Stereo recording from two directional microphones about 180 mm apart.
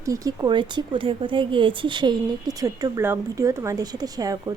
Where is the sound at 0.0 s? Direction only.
15° right (ahead or behind).